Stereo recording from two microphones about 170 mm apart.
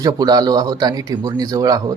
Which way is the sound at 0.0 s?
20° right (ahead or behind).